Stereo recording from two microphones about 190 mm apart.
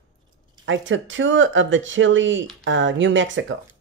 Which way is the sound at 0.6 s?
80° right.